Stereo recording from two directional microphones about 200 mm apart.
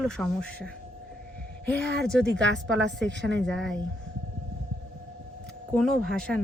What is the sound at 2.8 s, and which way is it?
Speech, 60° right (ahead or behind).